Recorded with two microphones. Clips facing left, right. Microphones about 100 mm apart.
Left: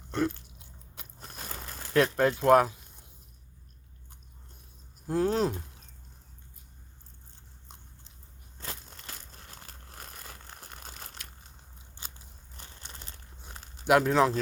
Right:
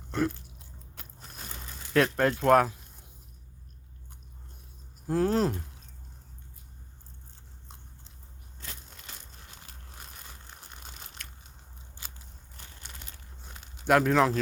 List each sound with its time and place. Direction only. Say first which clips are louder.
0.1 s biting: even; 5° right (ahead or behind)
1.2 s a sound: left 3 dB; 40° left (ahead or behind)
1.9 s speech: even; 5° left (ahead or behind)
5.0 s speech: right 1 dB; centre (ahead or behind)
8.6 s crumpling: left 4 dB; 45° left (ahead or behind)
12.5 s a sound: left 1 dB; 30° left (ahead or behind)
13.8 s speech: even; 5° left (ahead or behind)